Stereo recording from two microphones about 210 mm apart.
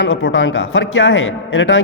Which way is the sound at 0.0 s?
65° left (ahead or behind).